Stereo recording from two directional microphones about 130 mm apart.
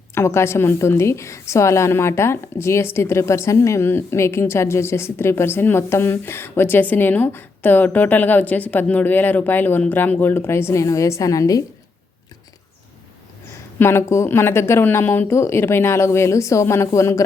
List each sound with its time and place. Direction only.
0.1 s a woman's voice: 20° left (ahead or behind)
13.7 s a woman's voice: 20° left (ahead or behind)